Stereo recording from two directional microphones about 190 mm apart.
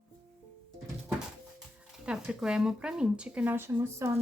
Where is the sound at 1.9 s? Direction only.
5° right (ahead or behind).